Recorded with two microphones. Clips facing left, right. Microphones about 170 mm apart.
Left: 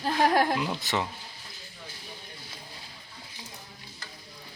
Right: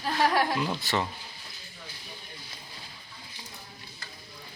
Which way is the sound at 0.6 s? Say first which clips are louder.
Right 1 dB; 15° left (ahead or behind).